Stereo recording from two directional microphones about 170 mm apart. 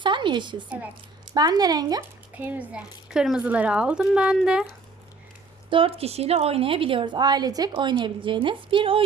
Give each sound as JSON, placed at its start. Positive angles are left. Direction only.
{"t": 0.0, "sound": "a sound", "side_deg": -30}
{"t": 1.3, "sound": "speech", "side_deg": -25}
{"t": 2.3, "sound": "speech", "side_deg": -10}
{"t": 5.7, "sound": "a woman's voice", "side_deg": -35}